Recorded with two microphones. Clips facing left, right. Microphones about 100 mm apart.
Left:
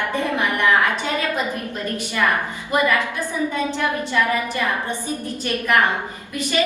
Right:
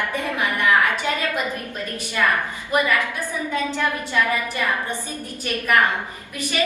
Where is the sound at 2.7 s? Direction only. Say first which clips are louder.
Left 1 dB; 20° left (ahead or behind).